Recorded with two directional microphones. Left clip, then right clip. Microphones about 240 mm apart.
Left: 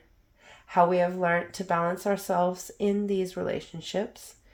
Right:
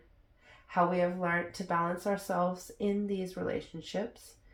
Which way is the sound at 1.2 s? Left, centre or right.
Left.